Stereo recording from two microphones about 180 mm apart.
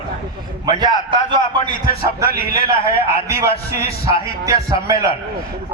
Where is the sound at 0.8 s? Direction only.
25° right (ahead or behind).